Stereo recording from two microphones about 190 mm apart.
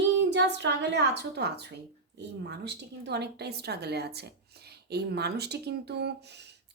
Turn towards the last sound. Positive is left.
turn(degrees=-60)  # may be behind; listen again after turning